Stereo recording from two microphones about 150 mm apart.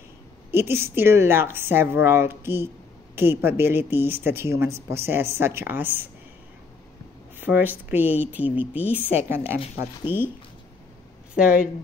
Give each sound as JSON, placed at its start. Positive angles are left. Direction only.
{"t": 0.5, "sound": "speech", "side_deg": -15}
{"t": 7.3, "sound": "speech", "side_deg": -10}
{"t": 11.3, "sound": "speech", "side_deg": -5}